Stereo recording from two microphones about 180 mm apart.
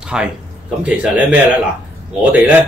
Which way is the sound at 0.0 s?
5° right (ahead or behind).